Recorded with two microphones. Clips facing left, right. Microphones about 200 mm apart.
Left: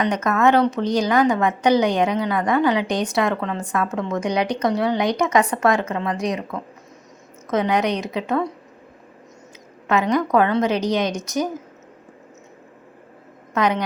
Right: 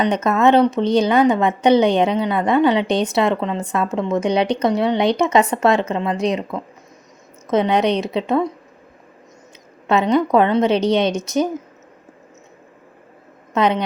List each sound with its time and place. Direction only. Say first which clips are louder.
0.0 s a woman's voice: right 3 dB; 25° right (ahead or behind)
9.8 s a woman's voice: right 3 dB; 25° right (ahead or behind)
13.5 s a woman's voice: right 3 dB; 25° right (ahead or behind)